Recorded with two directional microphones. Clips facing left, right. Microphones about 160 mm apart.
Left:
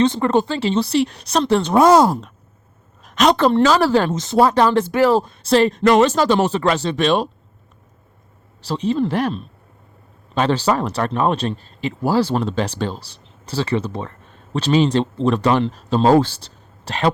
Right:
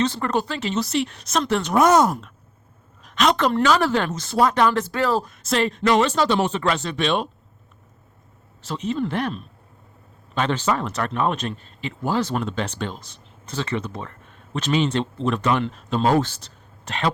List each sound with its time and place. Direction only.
0.0 s speech: 25° left (ahead or behind)
3.0 s speech: 40° left (ahead or behind)
4.1 s speech: 20° left (ahead or behind); by 7.3 s 40° left (ahead or behind)
8.6 s speech: 35° left (ahead or behind)